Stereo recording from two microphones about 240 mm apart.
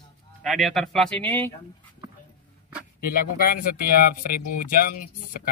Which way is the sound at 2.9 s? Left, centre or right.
Left.